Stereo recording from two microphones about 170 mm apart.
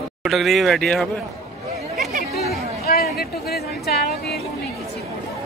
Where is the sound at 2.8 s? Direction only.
65° left (ahead or behind).